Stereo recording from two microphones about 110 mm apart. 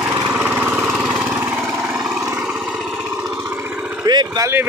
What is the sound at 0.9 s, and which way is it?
Vehicle, 10° right (ahead or behind).